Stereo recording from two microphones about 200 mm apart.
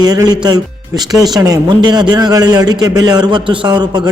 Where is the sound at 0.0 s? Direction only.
20° right (ahead or behind).